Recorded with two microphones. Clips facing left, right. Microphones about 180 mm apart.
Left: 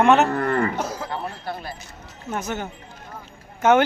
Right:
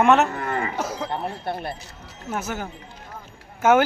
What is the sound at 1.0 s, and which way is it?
Speech, 25° right (ahead or behind).